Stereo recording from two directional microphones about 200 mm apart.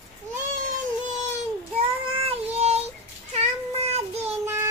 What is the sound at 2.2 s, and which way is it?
Child singing, 30° right (ahead or behind).